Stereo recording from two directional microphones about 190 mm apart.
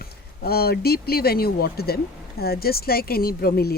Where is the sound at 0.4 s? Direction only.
55° left (ahead or behind).